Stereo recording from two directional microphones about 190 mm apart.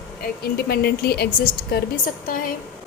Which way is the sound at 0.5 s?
55° left (ahead or behind).